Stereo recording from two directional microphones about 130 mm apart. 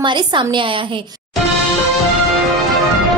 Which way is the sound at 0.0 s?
35° right (ahead or behind).